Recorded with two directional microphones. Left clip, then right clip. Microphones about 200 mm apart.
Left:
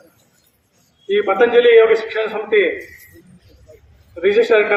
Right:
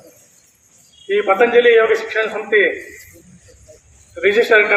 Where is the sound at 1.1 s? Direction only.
50° left (ahead or behind).